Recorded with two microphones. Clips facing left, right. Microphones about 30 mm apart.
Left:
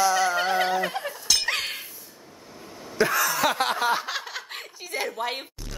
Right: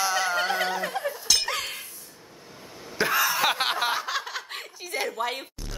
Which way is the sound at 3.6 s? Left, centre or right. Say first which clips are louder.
Left 1 dB; right.